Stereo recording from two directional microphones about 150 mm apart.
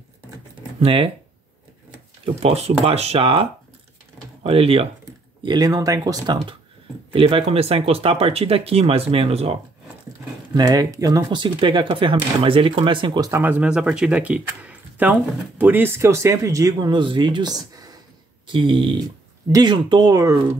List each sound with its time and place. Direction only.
0.7 s speech: 40° right (ahead or behind)
2.2 s speech: 40° right (ahead or behind)
5.4 s speech: 30° right (ahead or behind)
10.5 s speech: 25° right (ahead or behind)
13.3 s speech: 10° right (ahead or behind)